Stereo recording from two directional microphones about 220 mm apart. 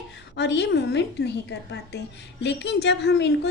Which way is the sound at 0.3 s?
50° left (ahead or behind).